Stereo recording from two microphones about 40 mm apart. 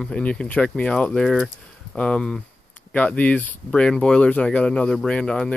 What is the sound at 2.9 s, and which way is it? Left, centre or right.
Speech, left.